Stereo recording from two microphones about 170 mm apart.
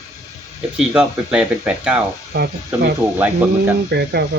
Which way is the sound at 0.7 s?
5° right (ahead or behind).